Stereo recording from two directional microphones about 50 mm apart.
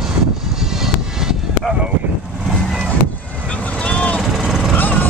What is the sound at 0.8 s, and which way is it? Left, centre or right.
Vehicle, centre.